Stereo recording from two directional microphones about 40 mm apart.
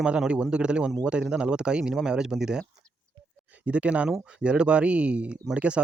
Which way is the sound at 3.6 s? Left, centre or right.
Right.